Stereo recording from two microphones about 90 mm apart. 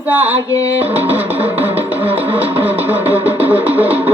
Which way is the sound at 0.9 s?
20° right (ahead or behind).